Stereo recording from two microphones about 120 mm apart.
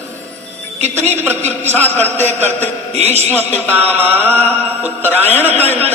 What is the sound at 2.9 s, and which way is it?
Speech, 65° right (ahead or behind).